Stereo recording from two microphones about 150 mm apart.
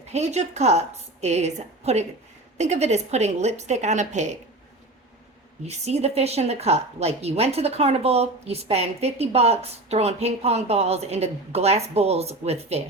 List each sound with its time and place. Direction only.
0.1 s a woman's voice: 50° right (ahead or behind)
5.6 s a woman's voice: 45° right (ahead or behind)